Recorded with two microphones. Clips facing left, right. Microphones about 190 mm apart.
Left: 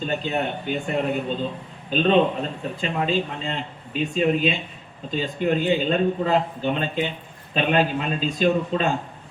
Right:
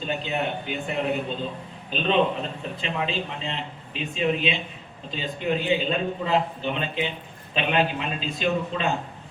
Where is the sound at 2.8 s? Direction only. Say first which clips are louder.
Left 5 dB; 45° left (ahead or behind).